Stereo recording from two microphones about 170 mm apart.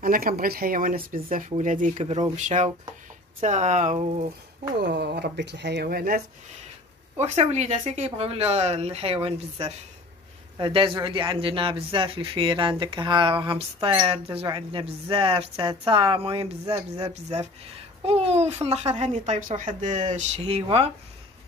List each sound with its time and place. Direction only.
0.0 s speech: 60° right (ahead or behind); by 4.3 s 45° right (ahead or behind)
4.7 s speech: 85° right; by 6.2 s 60° right (ahead or behind)
7.2 s speech: 40° right (ahead or behind)